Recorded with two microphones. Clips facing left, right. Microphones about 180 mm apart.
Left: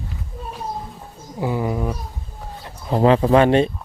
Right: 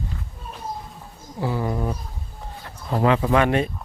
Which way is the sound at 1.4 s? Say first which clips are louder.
Left 3 dB; 15° left (ahead or behind).